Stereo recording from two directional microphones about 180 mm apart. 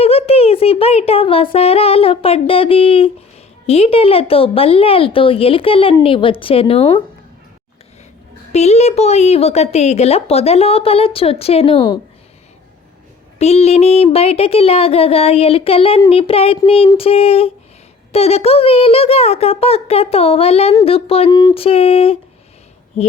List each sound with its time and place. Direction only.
0.0 s a child's voice: 35° left (ahead or behind)
8.5 s a woman's voice: 40° left (ahead or behind)
13.4 s a woman's voice: 35° left (ahead or behind)